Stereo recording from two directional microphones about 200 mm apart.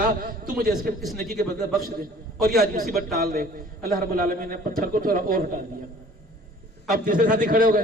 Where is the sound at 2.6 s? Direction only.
45° right (ahead or behind).